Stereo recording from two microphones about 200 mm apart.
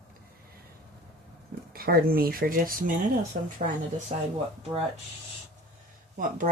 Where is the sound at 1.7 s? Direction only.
50° right (ahead or behind).